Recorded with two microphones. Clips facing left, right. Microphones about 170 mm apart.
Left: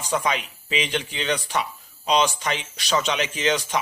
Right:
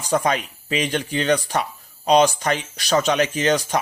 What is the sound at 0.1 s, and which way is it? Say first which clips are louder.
Speech: right 4 dB; 45° right (ahead or behind).